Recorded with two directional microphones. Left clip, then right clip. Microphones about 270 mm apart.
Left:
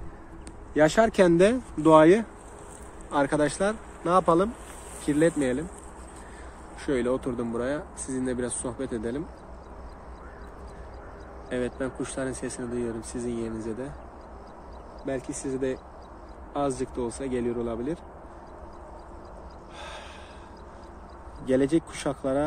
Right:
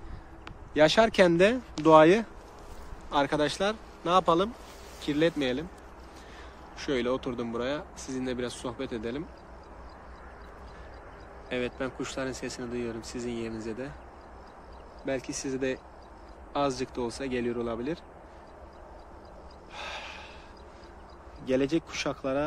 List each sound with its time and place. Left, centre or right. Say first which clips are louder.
0.7 s speech: left 1 dB; centre
6.8 s speech: left 2 dB; centre
11.4 s speech: left 2 dB; centre
15.0 s speech: left 1 dB; centre
19.8 s gasp: right 3 dB; centre
21.5 s speech: left 4 dB; centre